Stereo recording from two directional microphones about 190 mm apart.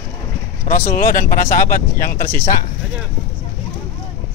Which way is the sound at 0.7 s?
45° left (ahead or behind).